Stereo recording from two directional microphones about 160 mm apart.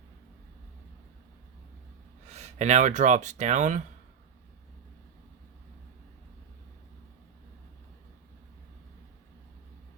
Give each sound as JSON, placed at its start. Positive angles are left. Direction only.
{"t": 2.3, "sound": "speech", "side_deg": -45}